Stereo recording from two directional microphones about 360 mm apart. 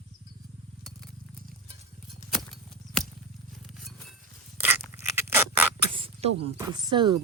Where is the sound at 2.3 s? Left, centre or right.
Centre.